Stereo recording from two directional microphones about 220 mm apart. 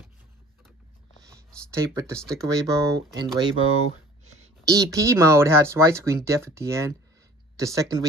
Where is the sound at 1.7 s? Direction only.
15° right (ahead or behind).